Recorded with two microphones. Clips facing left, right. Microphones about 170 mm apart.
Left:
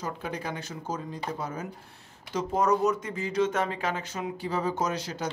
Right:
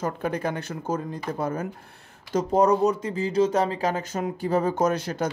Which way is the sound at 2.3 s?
40° right (ahead or behind).